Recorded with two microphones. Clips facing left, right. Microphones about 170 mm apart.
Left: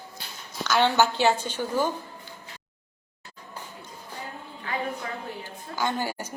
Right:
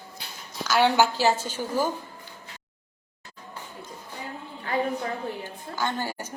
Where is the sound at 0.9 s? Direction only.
10° right (ahead or behind).